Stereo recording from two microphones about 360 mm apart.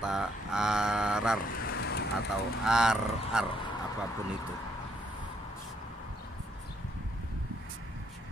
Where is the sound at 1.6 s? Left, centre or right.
Left.